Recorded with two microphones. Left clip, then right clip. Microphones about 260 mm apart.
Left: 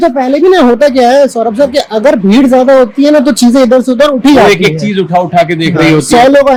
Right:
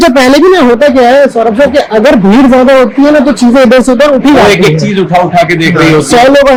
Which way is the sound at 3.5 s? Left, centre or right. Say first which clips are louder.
Right 4 dB; left.